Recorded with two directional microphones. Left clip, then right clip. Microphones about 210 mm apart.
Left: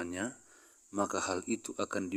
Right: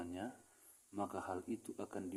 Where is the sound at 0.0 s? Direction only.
45° left (ahead or behind).